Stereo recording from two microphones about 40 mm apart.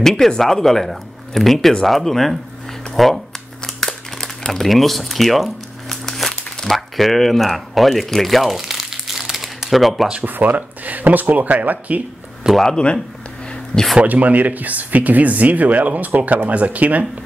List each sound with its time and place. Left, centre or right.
0.0 s speech: centre
3.6 s crumpling: centre
6.5 s a sound: centre
10.2 s speech: right
12.7 s speech: left
14.0 s speech: right